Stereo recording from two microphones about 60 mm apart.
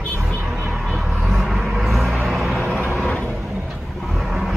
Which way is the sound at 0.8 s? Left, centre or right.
Centre.